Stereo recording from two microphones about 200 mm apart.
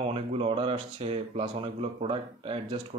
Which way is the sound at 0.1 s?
30° right (ahead or behind).